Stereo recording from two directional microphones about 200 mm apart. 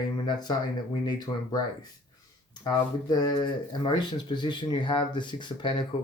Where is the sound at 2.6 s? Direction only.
20° left (ahead or behind).